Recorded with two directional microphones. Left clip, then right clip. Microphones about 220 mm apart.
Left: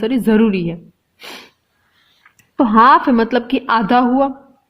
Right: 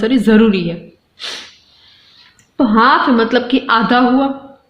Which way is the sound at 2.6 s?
45° left (ahead or behind).